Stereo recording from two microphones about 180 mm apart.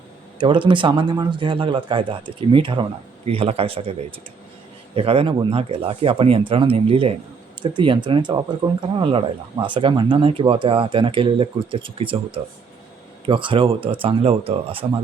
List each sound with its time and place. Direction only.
0.3 s speech: 25° right (ahead or behind)
4.9 s speech: 30° right (ahead or behind)